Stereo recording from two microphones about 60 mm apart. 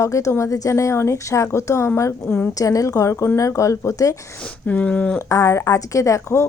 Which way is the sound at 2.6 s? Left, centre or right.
Left.